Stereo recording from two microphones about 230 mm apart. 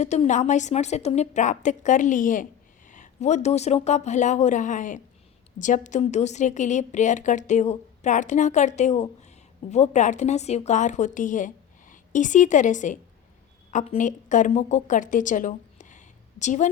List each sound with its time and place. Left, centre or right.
0.0 s a woman's voice: left